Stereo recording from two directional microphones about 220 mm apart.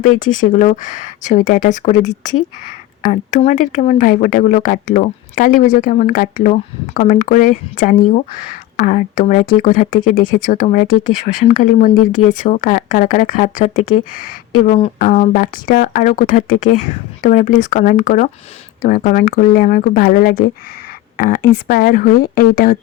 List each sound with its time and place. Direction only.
0.0 s speech: 35° left (ahead or behind)